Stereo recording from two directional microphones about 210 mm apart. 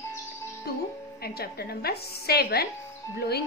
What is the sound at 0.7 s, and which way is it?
A woman's voice, 50° left (ahead or behind).